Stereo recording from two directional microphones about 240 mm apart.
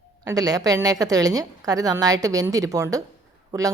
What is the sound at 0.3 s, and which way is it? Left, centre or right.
A woman's voice, centre.